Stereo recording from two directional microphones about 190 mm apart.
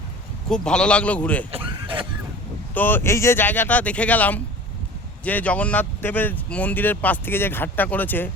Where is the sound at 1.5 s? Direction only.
30° right (ahead or behind).